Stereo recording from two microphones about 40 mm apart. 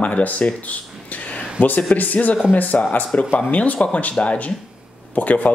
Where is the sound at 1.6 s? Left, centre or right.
Left.